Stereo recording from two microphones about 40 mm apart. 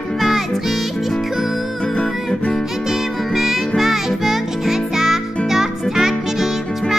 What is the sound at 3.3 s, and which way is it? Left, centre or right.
Music, centre.